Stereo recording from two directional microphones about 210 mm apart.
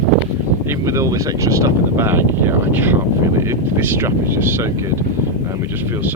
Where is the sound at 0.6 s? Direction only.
15° right (ahead or behind).